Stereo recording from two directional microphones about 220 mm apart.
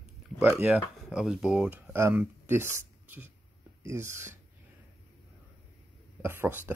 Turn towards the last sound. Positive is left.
turn(degrees=-10)  # may be behind; listen again after turning